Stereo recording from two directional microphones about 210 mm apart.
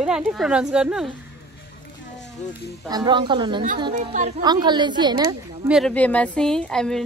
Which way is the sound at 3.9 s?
40° right (ahead or behind).